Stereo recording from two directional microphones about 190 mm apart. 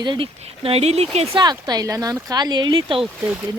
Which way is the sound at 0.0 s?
25° right (ahead or behind).